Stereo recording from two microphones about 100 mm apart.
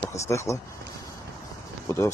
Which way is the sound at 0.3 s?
30° left (ahead or behind).